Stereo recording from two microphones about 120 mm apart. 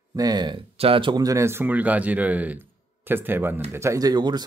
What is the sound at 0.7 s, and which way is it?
Speech, 50° right (ahead or behind).